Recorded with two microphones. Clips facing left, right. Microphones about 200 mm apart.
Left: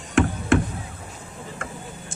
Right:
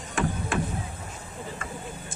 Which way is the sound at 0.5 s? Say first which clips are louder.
Left 11 dB; 75° left (ahead or behind).